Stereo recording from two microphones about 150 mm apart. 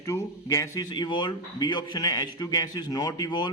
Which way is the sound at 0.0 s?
20° left (ahead or behind).